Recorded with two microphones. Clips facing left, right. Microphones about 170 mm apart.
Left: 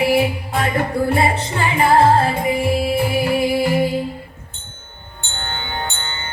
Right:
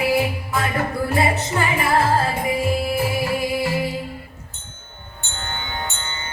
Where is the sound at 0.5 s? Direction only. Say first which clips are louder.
Left 3 dB; 30° left (ahead or behind).